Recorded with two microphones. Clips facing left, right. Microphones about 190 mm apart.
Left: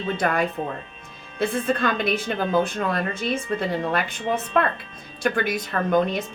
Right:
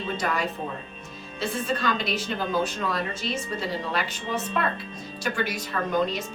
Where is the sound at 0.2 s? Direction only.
55° left (ahead or behind).